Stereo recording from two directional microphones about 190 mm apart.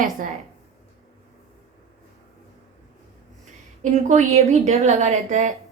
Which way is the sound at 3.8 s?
40° right (ahead or behind).